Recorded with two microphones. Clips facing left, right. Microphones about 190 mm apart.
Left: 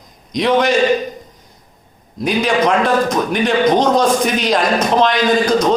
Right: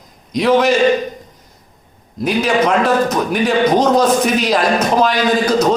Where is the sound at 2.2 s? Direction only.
5° right (ahead or behind).